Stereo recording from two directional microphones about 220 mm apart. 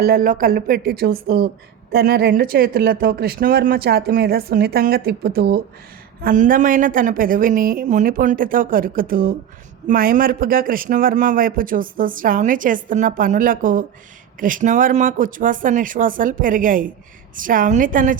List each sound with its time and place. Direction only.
0.0 s a man's voice: 40° right (ahead or behind)